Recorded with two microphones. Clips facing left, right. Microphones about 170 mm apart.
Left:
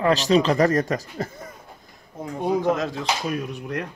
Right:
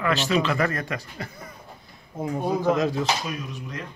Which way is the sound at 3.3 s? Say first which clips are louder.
Left 6 dB; 60° left (ahead or behind).